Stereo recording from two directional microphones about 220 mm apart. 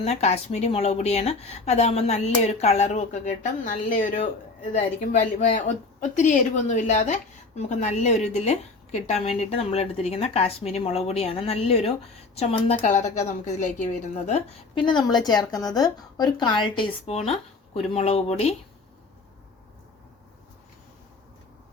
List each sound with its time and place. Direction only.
0.0 s a woman's voice: 30° left (ahead or behind)